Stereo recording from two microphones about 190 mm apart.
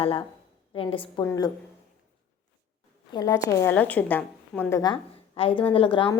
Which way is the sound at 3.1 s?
20° left (ahead or behind).